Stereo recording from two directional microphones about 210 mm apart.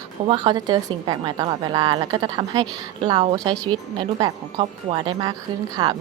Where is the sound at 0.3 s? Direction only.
20° right (ahead or behind).